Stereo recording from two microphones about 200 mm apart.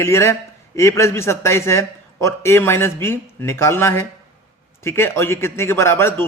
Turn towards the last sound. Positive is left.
turn(degrees=10)  # may be behind; listen again after turning